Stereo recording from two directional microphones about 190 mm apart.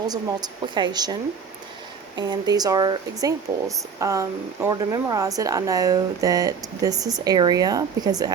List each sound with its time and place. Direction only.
0.1 s a woman's voice: 20° right (ahead or behind)